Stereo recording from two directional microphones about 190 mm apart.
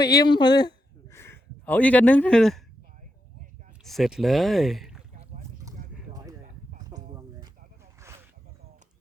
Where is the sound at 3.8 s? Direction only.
Centre (ahead or behind).